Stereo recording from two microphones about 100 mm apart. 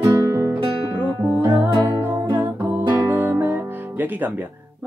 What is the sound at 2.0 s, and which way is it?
Music, 20° right (ahead or behind).